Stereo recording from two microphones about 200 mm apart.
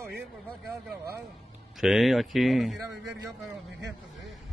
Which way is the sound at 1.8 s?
Centre (ahead or behind).